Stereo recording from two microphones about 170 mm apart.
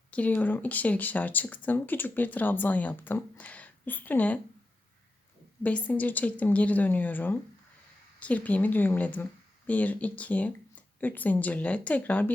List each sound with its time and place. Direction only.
0.1 s speech: 10° left (ahead or behind)
5.6 s speech: 10° left (ahead or behind)